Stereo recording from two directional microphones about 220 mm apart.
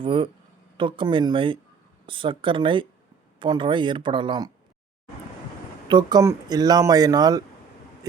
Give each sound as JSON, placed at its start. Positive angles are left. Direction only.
{"t": 0.0, "sound": "speech", "side_deg": -25}
{"t": 5.9, "sound": "speech", "side_deg": -20}